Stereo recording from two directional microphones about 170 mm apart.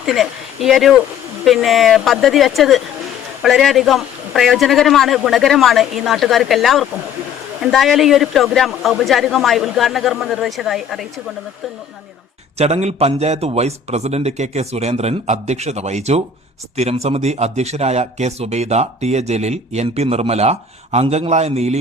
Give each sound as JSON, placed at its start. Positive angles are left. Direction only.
{"t": 0.0, "sound": "a man's voice", "side_deg": 0}
{"t": 12.5, "sound": "a man's voice", "side_deg": -40}